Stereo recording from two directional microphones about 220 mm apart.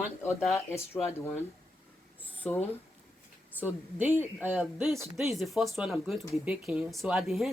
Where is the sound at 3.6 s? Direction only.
5° right (ahead or behind).